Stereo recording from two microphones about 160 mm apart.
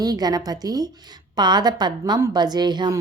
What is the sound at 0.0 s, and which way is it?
A woman's voice, 25° right (ahead or behind).